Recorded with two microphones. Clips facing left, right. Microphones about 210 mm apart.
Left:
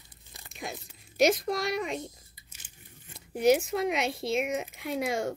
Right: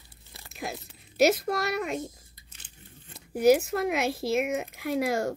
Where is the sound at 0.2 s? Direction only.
15° left (ahead or behind).